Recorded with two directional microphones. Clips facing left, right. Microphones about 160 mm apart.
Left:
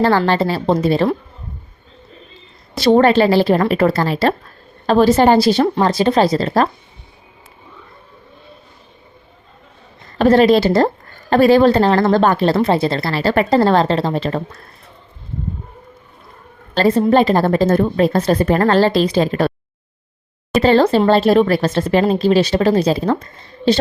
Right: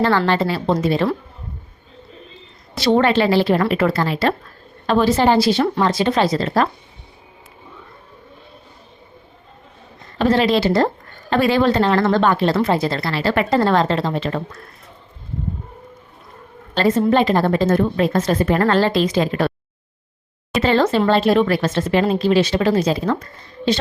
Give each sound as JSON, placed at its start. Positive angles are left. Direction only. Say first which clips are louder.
{"t": 0.0, "sound": "speech", "louder": "left 2 dB", "side_deg": 35}
{"t": 2.8, "sound": "speech", "louder": "left 4 dB", "side_deg": 45}
{"t": 10.2, "sound": "a woman's voice", "louder": "left 5 dB", "side_deg": 45}
{"t": 12.5, "sound": "speech", "louder": "left 3 dB", "side_deg": 30}
{"t": 16.7, "sound": "a woman's voice", "louder": "left 3 dB", "side_deg": 35}
{"t": 20.6, "sound": "speech", "louder": "left 4 dB", "side_deg": 35}